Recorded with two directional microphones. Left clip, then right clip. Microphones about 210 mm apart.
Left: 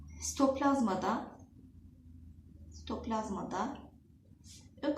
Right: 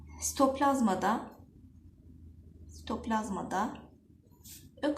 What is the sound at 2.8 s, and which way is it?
Speech, 45° right (ahead or behind).